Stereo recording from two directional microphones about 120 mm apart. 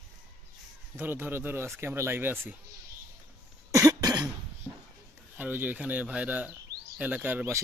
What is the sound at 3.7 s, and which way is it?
Cough, 30° right (ahead or behind).